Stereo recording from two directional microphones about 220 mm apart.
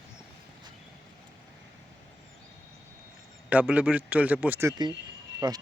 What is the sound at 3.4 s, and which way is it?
Speech, 5° right (ahead or behind).